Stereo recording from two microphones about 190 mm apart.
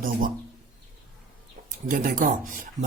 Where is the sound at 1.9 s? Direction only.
45° right (ahead or behind).